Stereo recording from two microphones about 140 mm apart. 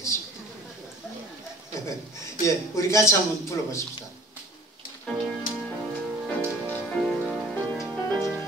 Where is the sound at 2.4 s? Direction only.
20° left (ahead or behind).